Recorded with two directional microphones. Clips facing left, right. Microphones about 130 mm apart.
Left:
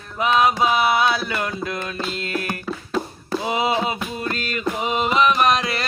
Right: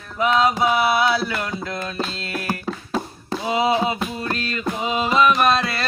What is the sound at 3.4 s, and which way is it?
Music, 20° left (ahead or behind).